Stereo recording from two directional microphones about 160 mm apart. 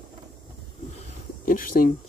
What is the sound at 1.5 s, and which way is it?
Speech, 60° left (ahead or behind).